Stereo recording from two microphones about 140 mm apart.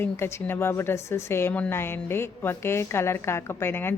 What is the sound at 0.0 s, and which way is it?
A woman's voice, 15° left (ahead or behind).